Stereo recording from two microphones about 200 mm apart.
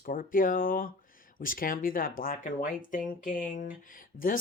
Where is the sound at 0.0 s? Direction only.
40° left (ahead or behind).